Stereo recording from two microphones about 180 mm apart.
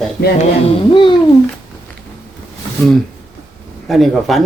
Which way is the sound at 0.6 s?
30° left (ahead or behind).